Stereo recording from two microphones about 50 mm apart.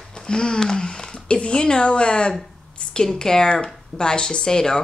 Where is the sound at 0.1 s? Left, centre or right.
Centre.